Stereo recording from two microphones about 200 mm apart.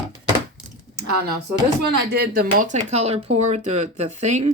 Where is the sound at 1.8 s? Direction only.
55° right (ahead or behind).